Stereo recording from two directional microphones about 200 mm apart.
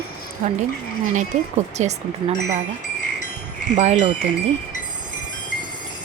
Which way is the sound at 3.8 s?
35° right (ahead or behind).